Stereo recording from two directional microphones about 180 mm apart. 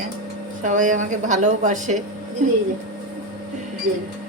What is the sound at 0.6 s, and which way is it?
A woman's voice, 45° right (ahead or behind).